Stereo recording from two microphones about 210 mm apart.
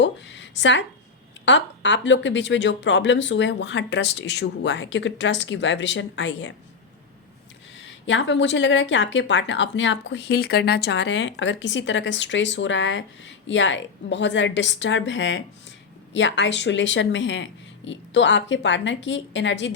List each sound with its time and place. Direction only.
0.0 s a sound: 60° left (ahead or behind)
1.5 s speech: 60° left (ahead or behind)
7.8 s speech: 60° left (ahead or behind)